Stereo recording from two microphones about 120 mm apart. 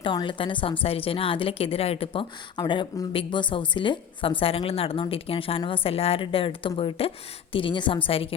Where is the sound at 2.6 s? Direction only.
35° left (ahead or behind).